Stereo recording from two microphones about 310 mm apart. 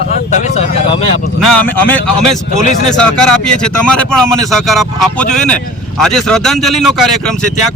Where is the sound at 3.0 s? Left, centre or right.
Centre.